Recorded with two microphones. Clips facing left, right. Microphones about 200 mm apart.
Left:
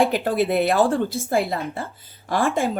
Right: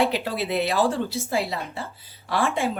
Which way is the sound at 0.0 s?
50° left (ahead or behind).